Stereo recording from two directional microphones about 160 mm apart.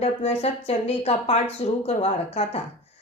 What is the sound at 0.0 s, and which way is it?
A woman's voice, 40° left (ahead or behind).